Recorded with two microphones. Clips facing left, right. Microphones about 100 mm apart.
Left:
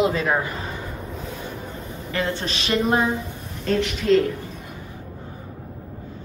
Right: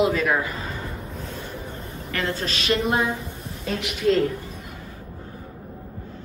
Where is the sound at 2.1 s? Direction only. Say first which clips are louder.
Left 1 dB; 25° left (ahead or behind).